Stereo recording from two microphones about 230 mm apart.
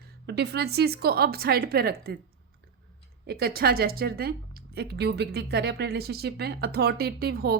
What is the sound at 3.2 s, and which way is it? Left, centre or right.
A woman's voice, right.